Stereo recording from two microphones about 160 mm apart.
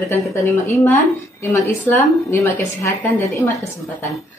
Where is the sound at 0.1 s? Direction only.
15° left (ahead or behind).